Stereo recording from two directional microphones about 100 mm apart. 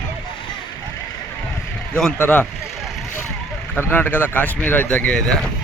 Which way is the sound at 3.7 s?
20° left (ahead or behind).